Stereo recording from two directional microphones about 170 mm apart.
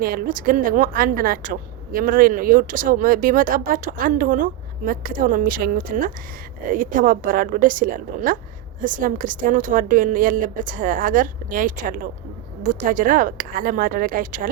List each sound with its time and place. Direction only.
0.0 s a woman's voice: 55° right (ahead or behind)